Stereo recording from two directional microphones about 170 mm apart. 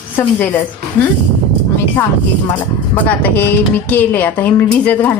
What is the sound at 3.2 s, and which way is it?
A woman's voice, 10° left (ahead or behind).